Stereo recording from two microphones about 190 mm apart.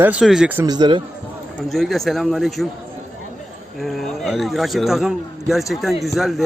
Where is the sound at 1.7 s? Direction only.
Centre (ahead or behind).